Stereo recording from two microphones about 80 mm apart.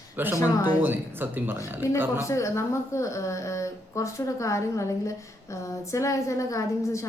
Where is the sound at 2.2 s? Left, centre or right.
Left.